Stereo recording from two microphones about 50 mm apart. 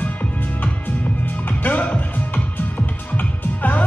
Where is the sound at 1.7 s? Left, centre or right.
Left.